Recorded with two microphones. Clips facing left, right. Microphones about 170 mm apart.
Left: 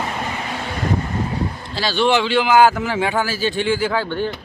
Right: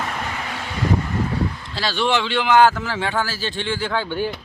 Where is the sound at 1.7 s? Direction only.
Centre (ahead or behind).